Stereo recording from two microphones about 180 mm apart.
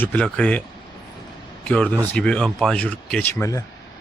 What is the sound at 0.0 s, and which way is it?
Speech, 10° left (ahead or behind).